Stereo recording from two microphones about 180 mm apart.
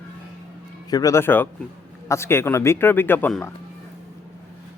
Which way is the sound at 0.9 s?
20° left (ahead or behind).